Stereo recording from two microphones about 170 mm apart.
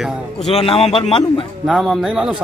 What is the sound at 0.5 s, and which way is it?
Speech, 35° left (ahead or behind).